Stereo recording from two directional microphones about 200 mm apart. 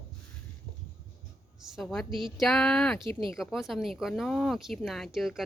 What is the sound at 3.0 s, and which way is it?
Speech, 25° right (ahead or behind).